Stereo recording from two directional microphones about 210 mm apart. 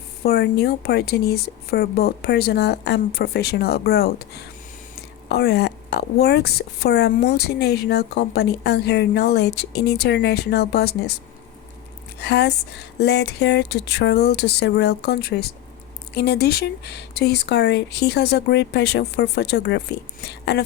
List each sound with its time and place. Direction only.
0.2 s speech: 50° left (ahead or behind)
12.2 s speech: 55° left (ahead or behind)